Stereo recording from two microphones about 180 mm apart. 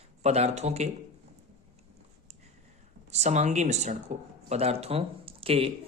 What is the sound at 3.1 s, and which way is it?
Speech, 40° right (ahead or behind).